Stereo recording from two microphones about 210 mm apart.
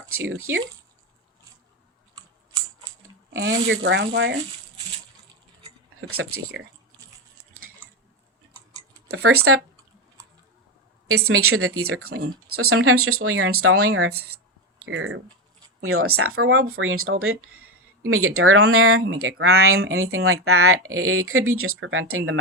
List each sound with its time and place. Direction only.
0.3 s speech: 75° right (ahead or behind)
3.3 s speech: 70° right (ahead or behind)
6.0 s speech: 90° right
9.0 s speech: 90° right
11.3 s speech: 90° right
14.8 s speech: 70° right (ahead or behind)
15.8 s speech: 90° right